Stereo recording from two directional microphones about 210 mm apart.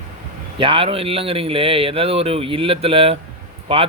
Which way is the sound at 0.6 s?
25° right (ahead or behind).